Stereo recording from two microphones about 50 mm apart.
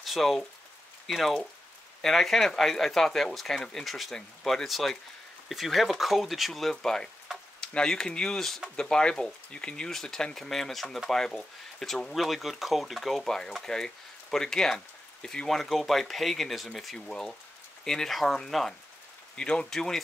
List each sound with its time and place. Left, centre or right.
0.0 s speech: centre
19.3 s speech: centre
19.7 s speech: centre